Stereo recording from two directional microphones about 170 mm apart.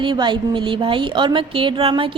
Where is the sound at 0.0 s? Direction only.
30° right (ahead or behind).